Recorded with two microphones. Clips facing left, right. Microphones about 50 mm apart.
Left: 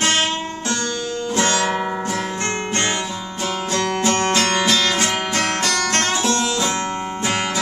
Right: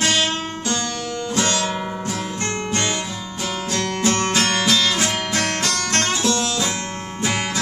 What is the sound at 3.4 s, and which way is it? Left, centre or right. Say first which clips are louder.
Music: left 3 dB; left.